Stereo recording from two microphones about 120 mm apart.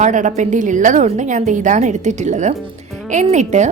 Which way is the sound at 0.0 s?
90° right.